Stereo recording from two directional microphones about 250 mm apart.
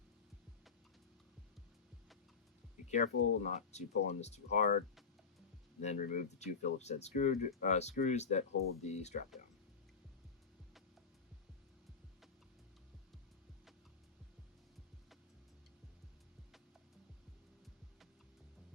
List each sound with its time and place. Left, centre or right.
2.8 s speech: left
5.8 s speech: left